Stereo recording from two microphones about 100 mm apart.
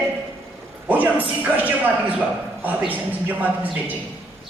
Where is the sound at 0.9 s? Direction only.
15° right (ahead or behind).